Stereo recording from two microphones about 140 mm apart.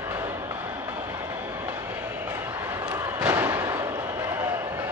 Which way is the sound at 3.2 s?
15° right (ahead or behind).